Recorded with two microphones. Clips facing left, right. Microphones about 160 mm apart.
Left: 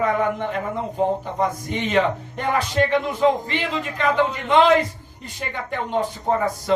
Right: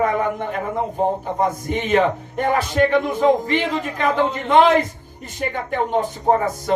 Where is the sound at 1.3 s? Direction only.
50° right (ahead or behind).